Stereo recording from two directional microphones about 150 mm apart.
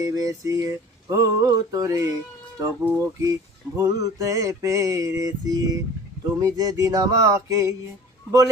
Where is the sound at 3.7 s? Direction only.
25° right (ahead or behind).